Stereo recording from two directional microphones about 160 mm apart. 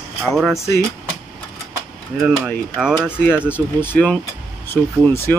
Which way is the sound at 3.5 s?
15° left (ahead or behind).